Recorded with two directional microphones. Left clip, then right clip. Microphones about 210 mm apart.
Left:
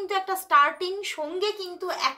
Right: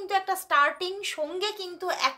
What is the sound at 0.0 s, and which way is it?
A woman's voice, 15° right (ahead or behind).